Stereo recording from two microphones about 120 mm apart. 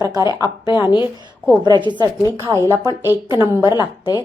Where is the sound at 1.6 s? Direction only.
40° right (ahead or behind).